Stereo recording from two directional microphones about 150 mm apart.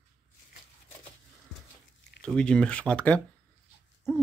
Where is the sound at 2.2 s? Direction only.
5° left (ahead or behind).